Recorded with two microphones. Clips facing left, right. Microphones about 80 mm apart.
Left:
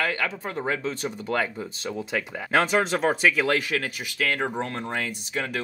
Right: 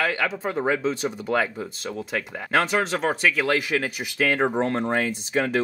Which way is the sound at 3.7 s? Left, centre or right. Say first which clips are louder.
Right 3 dB; centre.